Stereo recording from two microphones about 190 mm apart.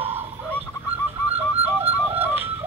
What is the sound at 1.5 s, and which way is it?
Music, 30° right (ahead or behind).